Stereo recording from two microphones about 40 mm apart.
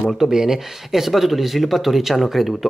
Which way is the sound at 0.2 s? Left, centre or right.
Centre.